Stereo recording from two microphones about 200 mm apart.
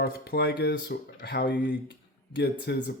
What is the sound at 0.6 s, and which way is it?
Speech, 55° left (ahead or behind).